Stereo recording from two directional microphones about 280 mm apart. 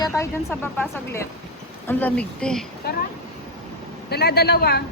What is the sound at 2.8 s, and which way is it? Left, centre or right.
Speech, left.